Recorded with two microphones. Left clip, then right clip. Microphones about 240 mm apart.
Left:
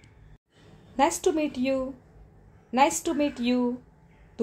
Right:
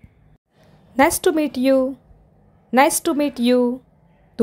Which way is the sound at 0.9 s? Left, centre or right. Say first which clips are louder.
Right 7 dB; right.